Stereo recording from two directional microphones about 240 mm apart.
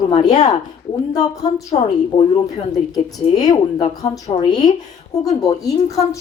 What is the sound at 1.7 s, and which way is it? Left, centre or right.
Speech, left.